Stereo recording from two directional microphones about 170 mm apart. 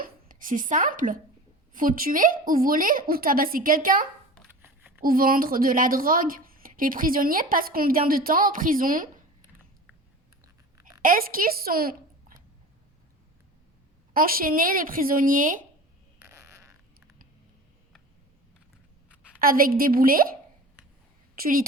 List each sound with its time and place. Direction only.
0.0 s a woman's voice: 55° right (ahead or behind)
4.6 s a sound: 10° right (ahead or behind)
5.0 s a woman's voice: 55° right (ahead or behind)
10.4 s a sound: 20° right (ahead or behind)
11.0 s a woman's voice: 55° right (ahead or behind)
14.1 s a woman's voice: 60° right (ahead or behind)
16.1 s fart: 15° right (ahead or behind)
19.4 s a woman's voice: 60° right (ahead or behind)
21.3 s a woman's voice: 55° right (ahead or behind)